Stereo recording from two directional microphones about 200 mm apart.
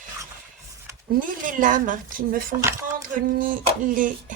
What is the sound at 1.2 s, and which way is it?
Speech, 40° right (ahead or behind).